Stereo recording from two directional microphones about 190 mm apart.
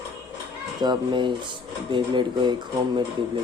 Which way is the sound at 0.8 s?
25° right (ahead or behind).